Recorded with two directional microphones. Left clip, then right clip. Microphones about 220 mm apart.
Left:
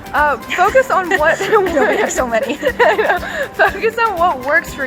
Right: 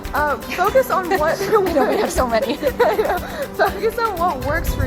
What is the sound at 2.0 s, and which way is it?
Speech, 15° right (ahead or behind).